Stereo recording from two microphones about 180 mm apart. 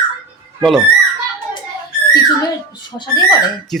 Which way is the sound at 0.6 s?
Centre (ahead or behind).